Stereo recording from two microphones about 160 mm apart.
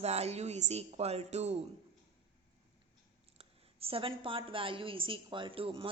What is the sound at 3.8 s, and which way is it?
A woman's voice, 35° right (ahead or behind).